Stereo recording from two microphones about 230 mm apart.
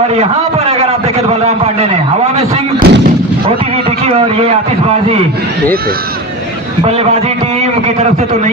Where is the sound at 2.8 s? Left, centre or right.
Right.